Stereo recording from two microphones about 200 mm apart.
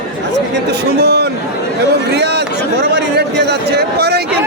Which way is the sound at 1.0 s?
55° right (ahead or behind).